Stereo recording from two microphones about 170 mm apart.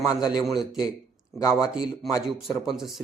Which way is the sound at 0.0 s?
25° left (ahead or behind).